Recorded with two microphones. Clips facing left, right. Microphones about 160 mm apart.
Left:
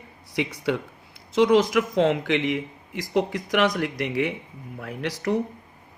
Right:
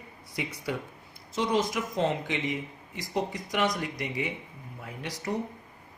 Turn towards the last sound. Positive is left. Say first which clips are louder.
# left 8 dB
turn(degrees=80)